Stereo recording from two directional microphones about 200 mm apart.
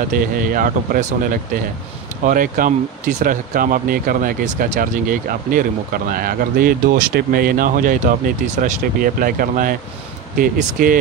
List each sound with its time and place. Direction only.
0.1 s speech: 45° right (ahead or behind)